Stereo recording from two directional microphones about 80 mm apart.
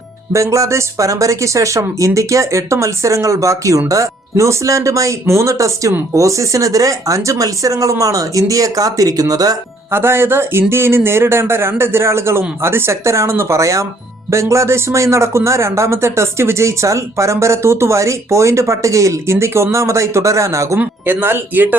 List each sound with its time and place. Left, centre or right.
0.3 s speech: right
9.9 s speech: right
20.7 s speech: right